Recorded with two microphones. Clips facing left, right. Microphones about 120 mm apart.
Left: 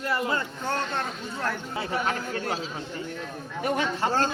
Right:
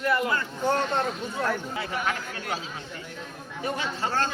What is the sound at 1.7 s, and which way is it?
Speech, 35° left (ahead or behind).